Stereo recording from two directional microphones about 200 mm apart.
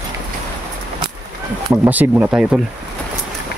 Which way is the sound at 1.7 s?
10° right (ahead or behind).